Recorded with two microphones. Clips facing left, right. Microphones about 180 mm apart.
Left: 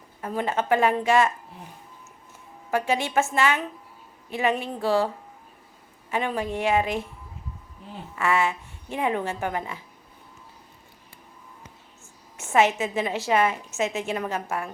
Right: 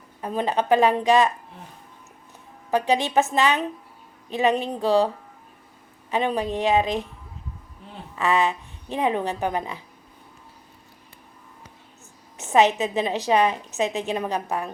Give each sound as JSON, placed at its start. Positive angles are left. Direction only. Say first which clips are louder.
{"t": 0.2, "sound": "a woman's voice", "louder": "right 2 dB", "side_deg": -20}
{"t": 2.6, "sound": "speech", "louder": "right 3 dB", "side_deg": -15}
{"t": 8.1, "sound": "speech", "louder": "right 2 dB", "side_deg": -20}
{"t": 12.4, "sound": "a woman's voice", "louder": "right 2 dB", "side_deg": -20}